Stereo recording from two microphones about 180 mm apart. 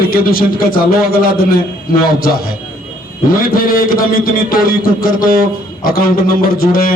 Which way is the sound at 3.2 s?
55° left (ahead or behind).